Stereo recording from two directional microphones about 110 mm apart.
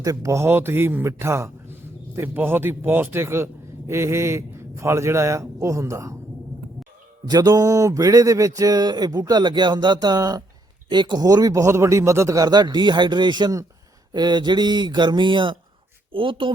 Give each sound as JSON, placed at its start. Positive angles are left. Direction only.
{"t": 0.0, "sound": "a man's voice", "side_deg": -30}
{"t": 7.3, "sound": "speech", "side_deg": -35}